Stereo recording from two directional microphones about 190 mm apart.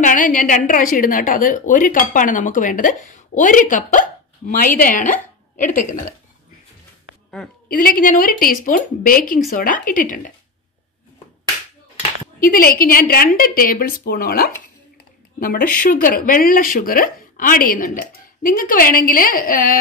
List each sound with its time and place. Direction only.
0.0 s a woman's voice: 45° left (ahead or behind)
7.6 s a woman's voice: 50° left (ahead or behind)
12.4 s a woman's voice: 50° left (ahead or behind)